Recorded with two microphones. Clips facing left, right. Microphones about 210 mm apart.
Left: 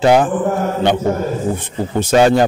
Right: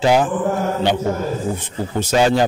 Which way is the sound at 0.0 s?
55° left (ahead or behind).